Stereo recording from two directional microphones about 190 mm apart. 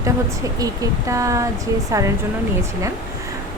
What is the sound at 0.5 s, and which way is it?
Speech, 20° right (ahead or behind).